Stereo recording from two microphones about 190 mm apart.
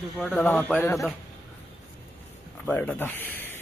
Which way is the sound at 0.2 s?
5° left (ahead or behind).